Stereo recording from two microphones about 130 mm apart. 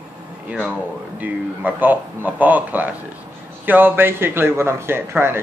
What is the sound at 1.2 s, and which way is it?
Speech, 15° right (ahead or behind).